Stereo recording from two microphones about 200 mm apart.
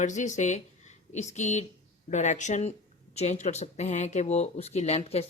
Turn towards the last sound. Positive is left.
turn(degrees=30)  # may be behind; listen again after turning